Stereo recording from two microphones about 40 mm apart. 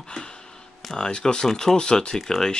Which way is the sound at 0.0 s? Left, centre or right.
Centre.